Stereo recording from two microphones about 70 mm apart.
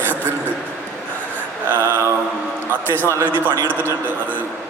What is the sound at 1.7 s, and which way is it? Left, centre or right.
Mantra, right.